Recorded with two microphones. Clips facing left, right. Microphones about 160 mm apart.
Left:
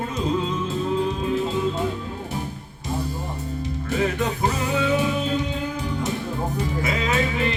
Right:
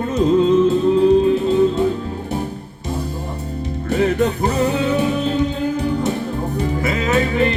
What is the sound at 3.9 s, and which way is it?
Music, 35° right (ahead or behind).